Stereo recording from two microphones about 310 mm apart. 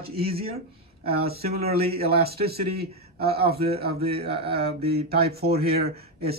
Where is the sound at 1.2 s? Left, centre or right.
Right.